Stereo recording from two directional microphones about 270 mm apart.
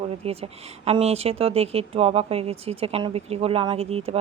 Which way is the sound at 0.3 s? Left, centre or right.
Right.